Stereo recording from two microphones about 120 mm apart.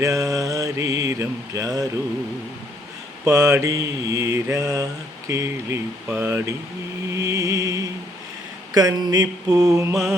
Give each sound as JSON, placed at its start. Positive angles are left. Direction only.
{"t": 0.0, "sound": "mantra", "side_deg": -30}
{"t": 3.2, "sound": "mantra", "side_deg": -30}
{"t": 7.1, "sound": "music", "side_deg": -25}
{"t": 8.7, "sound": "mantra", "side_deg": -30}